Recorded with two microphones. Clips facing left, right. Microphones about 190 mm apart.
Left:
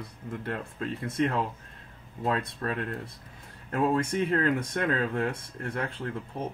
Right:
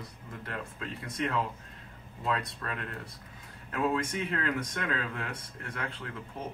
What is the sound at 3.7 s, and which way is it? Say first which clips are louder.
Speech: left 4 dB; 50° left (ahead or behind).